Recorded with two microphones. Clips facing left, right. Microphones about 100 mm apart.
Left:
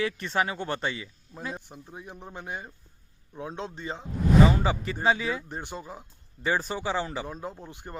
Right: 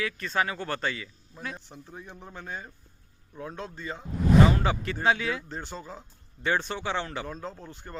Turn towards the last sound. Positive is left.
turn(degrees=15)  # may be behind; listen again after turning